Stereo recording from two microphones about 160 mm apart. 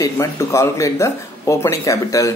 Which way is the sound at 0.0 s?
20° left (ahead or behind).